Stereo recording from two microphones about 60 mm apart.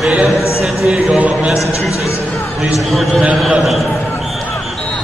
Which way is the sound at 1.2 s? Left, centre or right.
Right.